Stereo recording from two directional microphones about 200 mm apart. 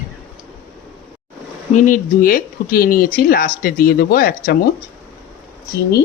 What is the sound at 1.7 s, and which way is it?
Speech, 40° left (ahead or behind).